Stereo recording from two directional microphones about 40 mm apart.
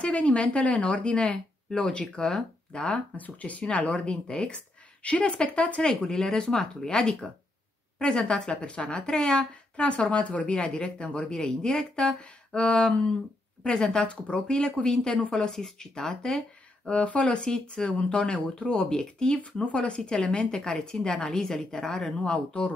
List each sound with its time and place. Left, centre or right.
0.0 s speech: left
3.2 s a woman's voice: left
6.0 s a woman's voice: centre
15.5 s a woman's voice: centre
16.9 s a woman's voice: left
17.4 s speech: centre
17.8 s speech: left
19.3 s a woman's voice: left
20.0 s a woman's voice: centre
22.1 s a woman's voice: left